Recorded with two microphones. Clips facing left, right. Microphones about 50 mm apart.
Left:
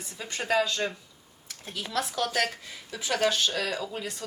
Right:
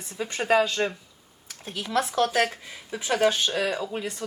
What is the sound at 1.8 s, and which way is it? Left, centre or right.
Speech, right.